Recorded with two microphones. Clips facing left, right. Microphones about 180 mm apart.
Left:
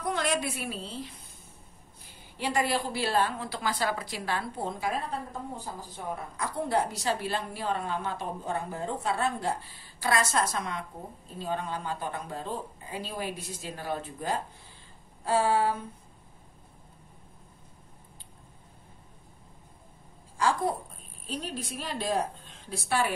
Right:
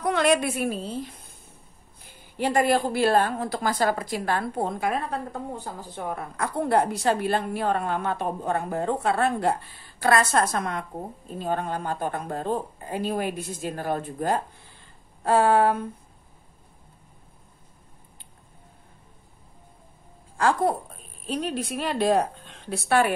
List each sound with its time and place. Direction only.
0.0 s a woman's voice: 70° right (ahead or behind); by 1.1 s 50° right (ahead or behind)
2.3 s a woman's voice: 50° right (ahead or behind)
20.3 s a woman's voice: 60° right (ahead or behind)